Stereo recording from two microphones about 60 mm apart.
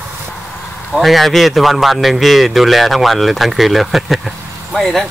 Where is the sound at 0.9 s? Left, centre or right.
Centre.